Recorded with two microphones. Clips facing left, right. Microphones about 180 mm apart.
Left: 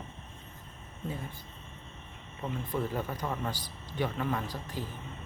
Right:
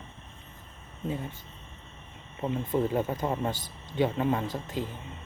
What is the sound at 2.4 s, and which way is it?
Speech, 20° right (ahead or behind).